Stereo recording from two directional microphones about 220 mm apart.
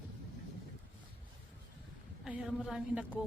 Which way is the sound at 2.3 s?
5° right (ahead or behind).